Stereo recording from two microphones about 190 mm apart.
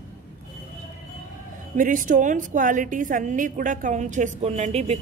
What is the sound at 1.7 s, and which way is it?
A woman's voice, 45° right (ahead or behind).